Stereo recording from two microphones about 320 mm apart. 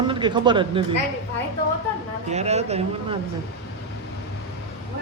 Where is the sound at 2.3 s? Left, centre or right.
Centre.